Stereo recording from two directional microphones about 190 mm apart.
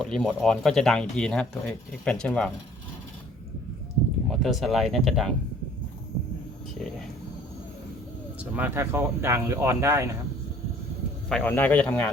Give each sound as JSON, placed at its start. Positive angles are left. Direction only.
{"t": 0.0, "sound": "speech", "side_deg": 0}
{"t": 4.3, "sound": "speech", "side_deg": 0}
{"t": 8.4, "sound": "speech", "side_deg": -10}
{"t": 11.3, "sound": "speech", "side_deg": 5}